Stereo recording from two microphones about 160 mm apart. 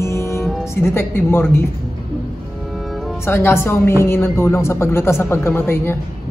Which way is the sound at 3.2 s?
15° left (ahead or behind).